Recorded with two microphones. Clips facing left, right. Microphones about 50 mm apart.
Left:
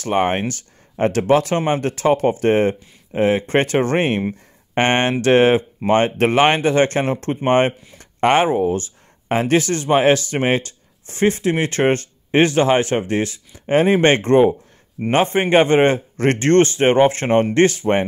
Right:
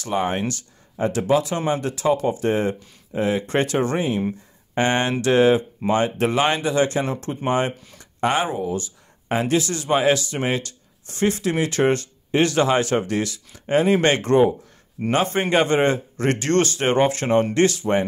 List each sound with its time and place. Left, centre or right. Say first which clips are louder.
0.0 s speech: left 4 dB; left
4.7 s speech: left 3 dB; left